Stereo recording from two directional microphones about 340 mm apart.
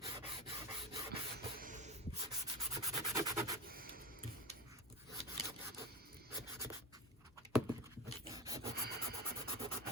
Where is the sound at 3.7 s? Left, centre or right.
Right.